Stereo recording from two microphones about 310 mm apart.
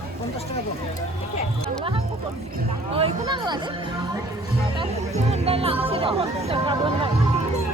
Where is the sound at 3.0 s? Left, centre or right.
Centre.